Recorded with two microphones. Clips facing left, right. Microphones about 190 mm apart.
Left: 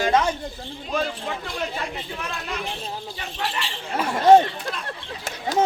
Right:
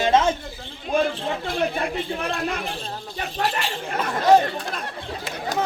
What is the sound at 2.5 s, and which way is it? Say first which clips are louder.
Speech: right 1 dB; 55° right (ahead or behind).